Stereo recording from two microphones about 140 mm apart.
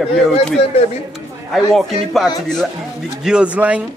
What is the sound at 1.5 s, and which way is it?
Speech, centre (ahead or behind).